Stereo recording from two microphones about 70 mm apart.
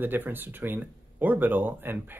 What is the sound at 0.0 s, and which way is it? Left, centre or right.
Speech, right.